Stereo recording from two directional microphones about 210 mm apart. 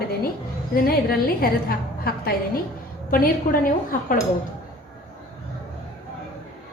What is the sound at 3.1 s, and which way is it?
Speech, 40° left (ahead or behind).